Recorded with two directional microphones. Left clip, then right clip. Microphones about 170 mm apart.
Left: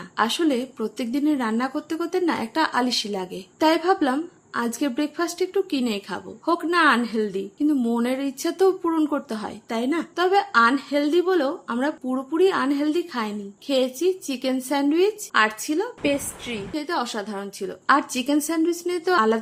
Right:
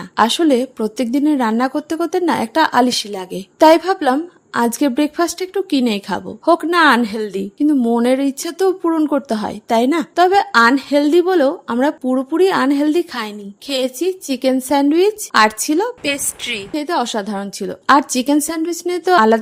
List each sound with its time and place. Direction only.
0.2 s a woman's voice: 50° right (ahead or behind); by 16.8 s 65° right (ahead or behind)
16.8 s a woman's voice: 45° right (ahead or behind)